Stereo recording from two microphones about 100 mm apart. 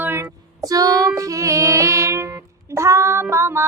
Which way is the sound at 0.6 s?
35° right (ahead or behind).